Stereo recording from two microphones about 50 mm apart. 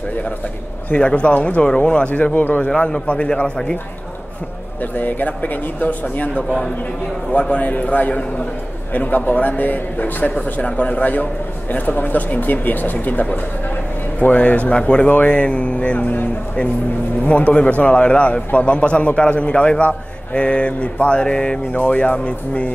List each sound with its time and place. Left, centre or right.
0.9 s a man's voice: left
2.0 s a man's voice: left
2.7 s a man's voice: left
4.9 s a man's voice: left
17.2 s a man's voice: left